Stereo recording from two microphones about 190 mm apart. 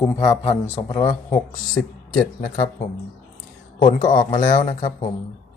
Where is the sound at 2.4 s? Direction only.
40° left (ahead or behind).